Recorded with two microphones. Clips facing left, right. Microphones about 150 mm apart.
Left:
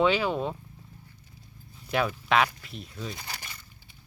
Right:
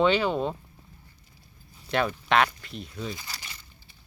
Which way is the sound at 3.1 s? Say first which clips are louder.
Left 1 dB; 55° left (ahead or behind).